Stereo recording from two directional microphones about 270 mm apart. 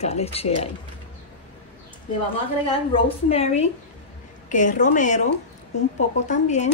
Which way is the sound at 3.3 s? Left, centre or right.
Left.